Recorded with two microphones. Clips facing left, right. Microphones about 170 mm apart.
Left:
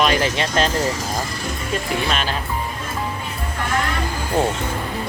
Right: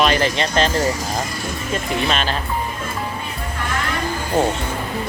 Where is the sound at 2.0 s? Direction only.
5° left (ahead or behind).